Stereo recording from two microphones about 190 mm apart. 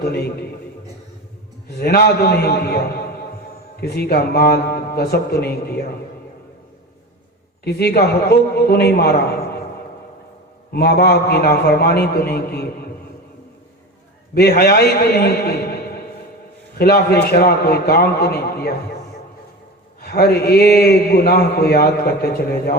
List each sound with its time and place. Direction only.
0.0 s a man's voice: 55° left (ahead or behind)
1.8 s a man's voice: 55° left (ahead or behind)
7.6 s a man's voice: 60° left (ahead or behind)
10.7 s a man's voice: 55° left (ahead or behind)
14.3 s a man's voice: 55° left (ahead or behind)
20.0 s a man's voice: 55° left (ahead or behind)